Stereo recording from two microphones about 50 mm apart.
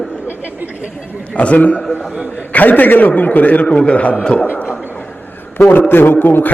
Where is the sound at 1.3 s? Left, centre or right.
Left.